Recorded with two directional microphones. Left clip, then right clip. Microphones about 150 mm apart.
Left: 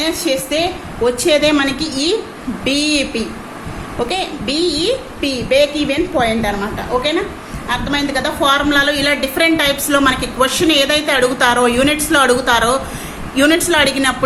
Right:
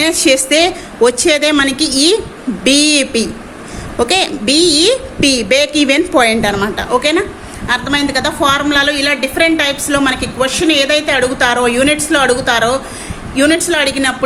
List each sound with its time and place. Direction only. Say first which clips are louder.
0.0 s a woman's voice: right 6 dB; 50° right (ahead or behind); by 14.3 s 15° right (ahead or behind)